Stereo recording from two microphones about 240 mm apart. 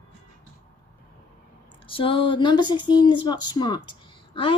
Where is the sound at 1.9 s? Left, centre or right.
Left.